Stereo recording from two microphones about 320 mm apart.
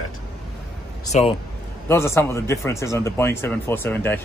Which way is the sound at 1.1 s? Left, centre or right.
Left.